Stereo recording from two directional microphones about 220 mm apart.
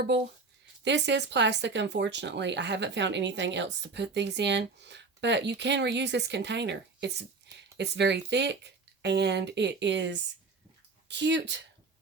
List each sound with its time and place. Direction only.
0.9 s speech: 55° right (ahead or behind)